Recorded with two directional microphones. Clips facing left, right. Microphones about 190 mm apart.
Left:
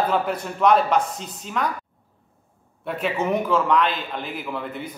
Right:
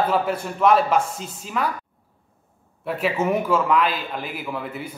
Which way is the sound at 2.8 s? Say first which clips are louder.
Right 2 dB; 5° right (ahead or behind).